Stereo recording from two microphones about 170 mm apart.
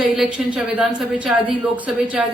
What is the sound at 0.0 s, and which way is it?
A woman's voice, centre (ahead or behind).